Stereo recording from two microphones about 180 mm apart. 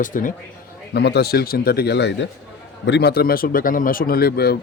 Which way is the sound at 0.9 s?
65° left (ahead or behind).